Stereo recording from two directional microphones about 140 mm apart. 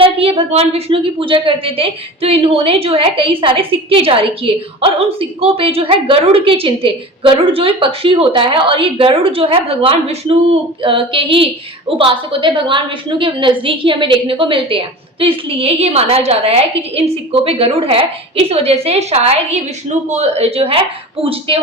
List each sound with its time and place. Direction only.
0.0 s a woman's voice: 45° right (ahead or behind)